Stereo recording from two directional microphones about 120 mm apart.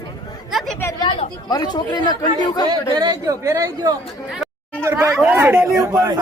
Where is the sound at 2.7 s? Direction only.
30° right (ahead or behind).